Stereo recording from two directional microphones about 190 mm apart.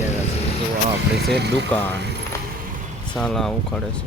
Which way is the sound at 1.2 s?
60° right (ahead or behind).